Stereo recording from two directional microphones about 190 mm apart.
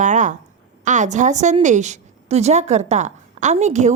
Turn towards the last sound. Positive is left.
turn(degrees=-40)  # may be behind; listen again after turning